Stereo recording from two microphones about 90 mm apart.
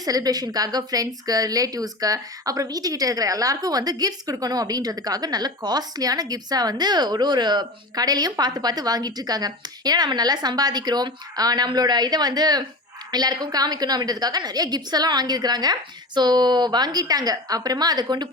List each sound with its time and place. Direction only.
0.0 s a woman's voice: 45° right (ahead or behind)